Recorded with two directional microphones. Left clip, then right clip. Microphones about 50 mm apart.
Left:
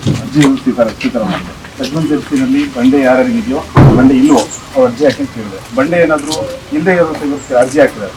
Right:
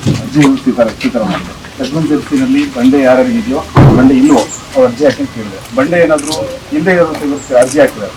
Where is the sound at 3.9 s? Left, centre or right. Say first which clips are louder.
Right 1 dB; right.